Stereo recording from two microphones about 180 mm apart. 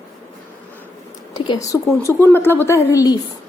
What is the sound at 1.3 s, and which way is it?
A woman's voice, 25° left (ahead or behind).